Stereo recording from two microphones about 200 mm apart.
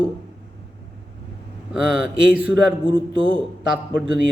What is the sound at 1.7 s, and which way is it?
Speech, 5° right (ahead or behind).